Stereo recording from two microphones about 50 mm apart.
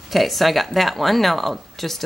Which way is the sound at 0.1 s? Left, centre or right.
Centre.